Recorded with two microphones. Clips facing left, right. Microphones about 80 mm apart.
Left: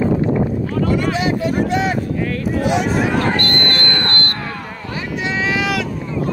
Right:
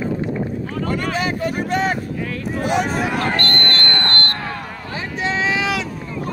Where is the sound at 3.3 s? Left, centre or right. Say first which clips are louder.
Left 2 dB; left.